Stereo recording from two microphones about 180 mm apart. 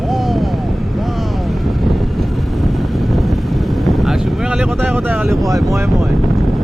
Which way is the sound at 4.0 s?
5° right (ahead or behind).